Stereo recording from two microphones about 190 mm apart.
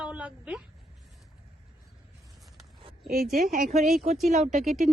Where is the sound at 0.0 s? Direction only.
5° right (ahead or behind).